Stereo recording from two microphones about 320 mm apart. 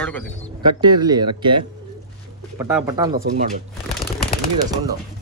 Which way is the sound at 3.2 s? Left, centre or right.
Right.